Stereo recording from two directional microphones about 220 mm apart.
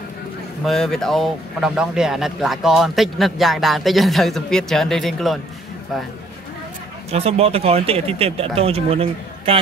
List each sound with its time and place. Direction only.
0.7 s speech: centre (ahead or behind)
7.1 s speech: 25° right (ahead or behind)